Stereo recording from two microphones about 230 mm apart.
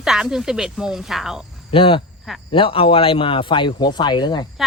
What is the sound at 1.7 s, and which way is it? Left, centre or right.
Speech, left.